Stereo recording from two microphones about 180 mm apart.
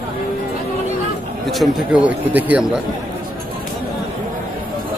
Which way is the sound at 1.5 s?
5° right (ahead or behind).